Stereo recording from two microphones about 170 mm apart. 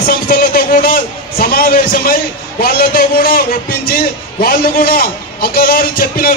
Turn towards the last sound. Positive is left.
turn(degrees=55)  # may be behind; listen again after turning